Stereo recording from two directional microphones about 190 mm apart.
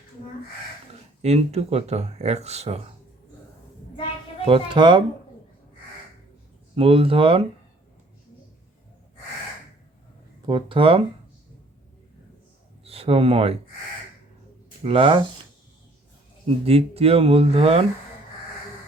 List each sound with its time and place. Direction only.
1.2 s speech: 35° right (ahead or behind)
4.4 s speech: 25° right (ahead or behind)
6.7 s speech: 30° right (ahead or behind)
10.4 s speech: 25° right (ahead or behind)
12.8 s speech: 30° right (ahead or behind)
14.8 s speech: 30° right (ahead or behind)
16.6 s speech: 30° right (ahead or behind)